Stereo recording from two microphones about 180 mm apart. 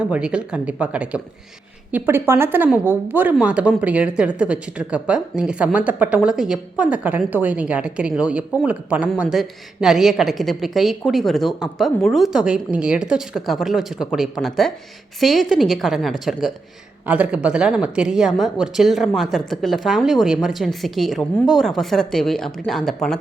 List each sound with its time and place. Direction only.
0.0 s a woman's voice: 5° right (ahead or behind)